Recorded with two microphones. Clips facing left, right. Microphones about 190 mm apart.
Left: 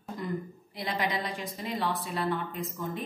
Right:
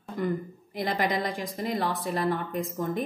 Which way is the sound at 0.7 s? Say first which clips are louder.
Right 4 dB; 50° right (ahead or behind).